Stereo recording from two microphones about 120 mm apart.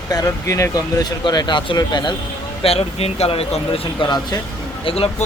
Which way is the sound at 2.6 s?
55° left (ahead or behind).